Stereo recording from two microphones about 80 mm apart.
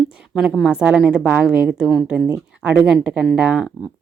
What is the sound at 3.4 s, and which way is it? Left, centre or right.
Speech, centre.